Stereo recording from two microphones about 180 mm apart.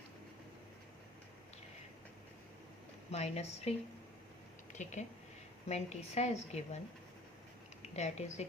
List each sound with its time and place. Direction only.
3.1 s a woman's voice: 35° left (ahead or behind)
7.8 s speech: 40° left (ahead or behind)